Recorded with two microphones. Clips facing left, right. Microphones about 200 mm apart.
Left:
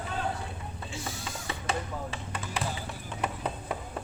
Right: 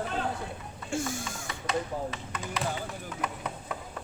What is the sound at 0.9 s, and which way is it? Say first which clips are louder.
Speech: right 8 dB; 50° right (ahead or behind).